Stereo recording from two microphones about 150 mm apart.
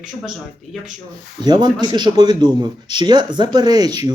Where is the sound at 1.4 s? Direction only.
30° right (ahead or behind).